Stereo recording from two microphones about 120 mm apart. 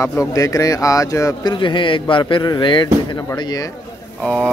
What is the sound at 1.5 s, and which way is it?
Speech, 40° left (ahead or behind).